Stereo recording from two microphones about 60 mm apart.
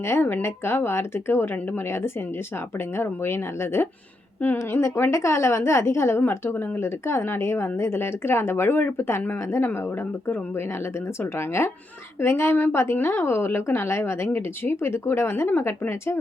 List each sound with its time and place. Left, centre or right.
0.0 s a woman's voice: left
4.4 s a woman's voice: left
5.1 s a woman's voice: left
10.2 s a woman's voice: left